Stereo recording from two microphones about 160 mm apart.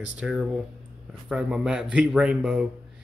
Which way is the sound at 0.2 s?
Centre (ahead or behind).